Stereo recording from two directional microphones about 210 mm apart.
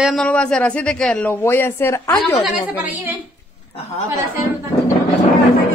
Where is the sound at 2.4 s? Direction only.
5° right (ahead or behind).